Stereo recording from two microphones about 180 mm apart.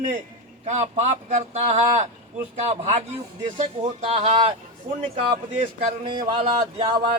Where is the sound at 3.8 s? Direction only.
35° right (ahead or behind).